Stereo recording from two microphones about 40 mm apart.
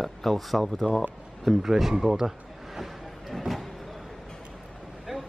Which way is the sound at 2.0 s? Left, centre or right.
Centre.